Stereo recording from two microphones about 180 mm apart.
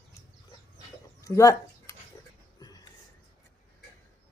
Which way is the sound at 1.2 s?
15° left (ahead or behind).